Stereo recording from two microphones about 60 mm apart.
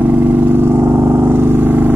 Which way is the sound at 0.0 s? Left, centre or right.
Right.